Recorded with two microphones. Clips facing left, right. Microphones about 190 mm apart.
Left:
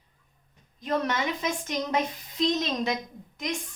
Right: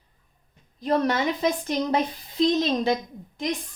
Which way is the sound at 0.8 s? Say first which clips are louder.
Right 5 dB; 35° right (ahead or behind).